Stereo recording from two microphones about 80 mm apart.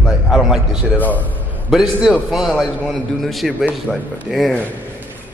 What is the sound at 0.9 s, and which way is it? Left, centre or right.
Speech, left.